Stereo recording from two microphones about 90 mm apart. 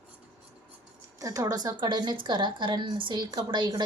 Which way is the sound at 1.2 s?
40° right (ahead or behind).